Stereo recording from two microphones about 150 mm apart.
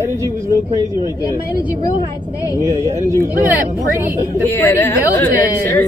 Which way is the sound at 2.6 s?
20° right (ahead or behind).